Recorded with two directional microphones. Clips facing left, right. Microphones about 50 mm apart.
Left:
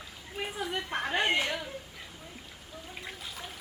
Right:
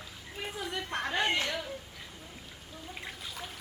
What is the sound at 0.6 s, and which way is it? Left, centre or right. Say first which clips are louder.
Speech: left 1 dB; centre.